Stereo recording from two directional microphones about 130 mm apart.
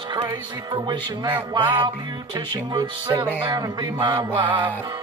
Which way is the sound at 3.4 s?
35° right (ahead or behind).